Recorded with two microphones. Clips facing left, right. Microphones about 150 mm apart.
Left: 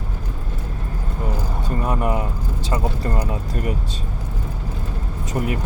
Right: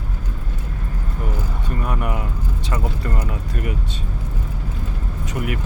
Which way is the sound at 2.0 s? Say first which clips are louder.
Left 4 dB; 30° left (ahead or behind).